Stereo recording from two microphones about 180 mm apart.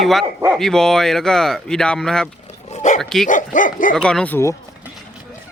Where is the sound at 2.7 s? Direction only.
40° left (ahead or behind).